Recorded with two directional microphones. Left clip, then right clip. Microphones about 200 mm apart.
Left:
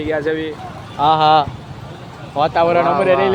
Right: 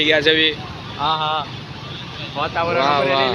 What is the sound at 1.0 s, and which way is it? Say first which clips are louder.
Speech: left 8 dB; 60° left (ahead or behind).